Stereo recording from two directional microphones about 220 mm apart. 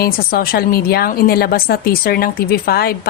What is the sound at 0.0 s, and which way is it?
A woman's voice, 40° left (ahead or behind).